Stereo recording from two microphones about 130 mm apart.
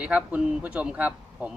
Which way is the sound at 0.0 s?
10° right (ahead or behind).